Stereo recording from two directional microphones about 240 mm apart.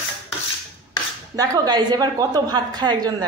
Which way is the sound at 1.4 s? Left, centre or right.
Centre.